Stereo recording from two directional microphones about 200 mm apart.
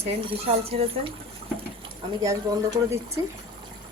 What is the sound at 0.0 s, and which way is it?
A woman's voice, 30° right (ahead or behind).